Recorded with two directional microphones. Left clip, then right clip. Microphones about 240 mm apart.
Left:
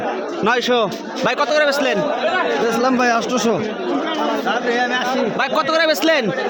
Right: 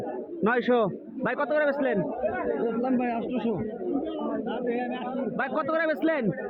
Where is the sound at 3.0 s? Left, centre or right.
Centre.